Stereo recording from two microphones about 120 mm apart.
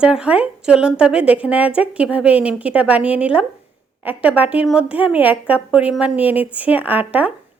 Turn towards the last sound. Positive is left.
turn(degrees=-15)  # may be behind; listen again after turning